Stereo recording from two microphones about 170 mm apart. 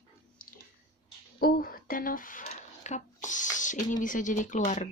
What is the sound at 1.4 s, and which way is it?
Speech, 60° left (ahead or behind).